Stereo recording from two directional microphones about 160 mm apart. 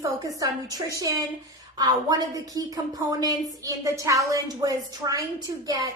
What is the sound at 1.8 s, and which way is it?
A woman's voice, 25° right (ahead or behind).